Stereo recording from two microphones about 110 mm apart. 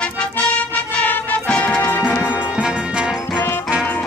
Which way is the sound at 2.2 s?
10° right (ahead or behind).